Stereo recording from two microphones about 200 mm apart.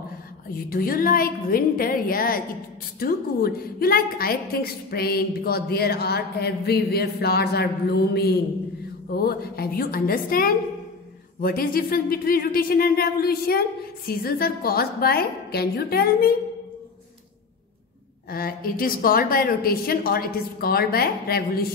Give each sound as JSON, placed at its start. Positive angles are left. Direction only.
{"t": 0.7, "sound": "a woman's voice", "side_deg": 45}
{"t": 18.3, "sound": "a woman's voice", "side_deg": 45}